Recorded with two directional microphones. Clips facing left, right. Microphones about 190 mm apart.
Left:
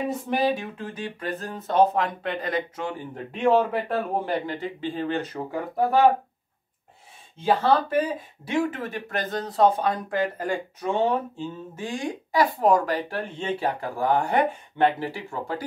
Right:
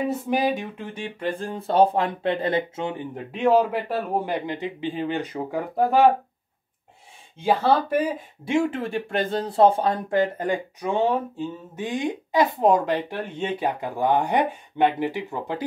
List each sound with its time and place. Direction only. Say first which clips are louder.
0.3 s speech: left 1 dB; 15° right (ahead or behind)
3.3 s speech: right 1 dB; 5° right (ahead or behind)
7.3 s speech: right 1 dB; 10° right (ahead or behind)
8.5 s speech: right 3 dB; 25° right (ahead or behind)